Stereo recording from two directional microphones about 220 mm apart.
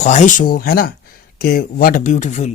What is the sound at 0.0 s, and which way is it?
Speech, 35° left (ahead or behind).